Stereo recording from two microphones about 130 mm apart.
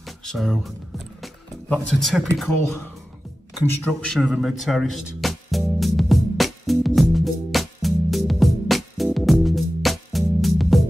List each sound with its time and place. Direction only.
0.0 s music: centre (ahead or behind)
1.7 s speech: 5° left (ahead or behind)
3.8 s a man's voice: 10° left (ahead or behind)
4.2 s music: 5° right (ahead or behind)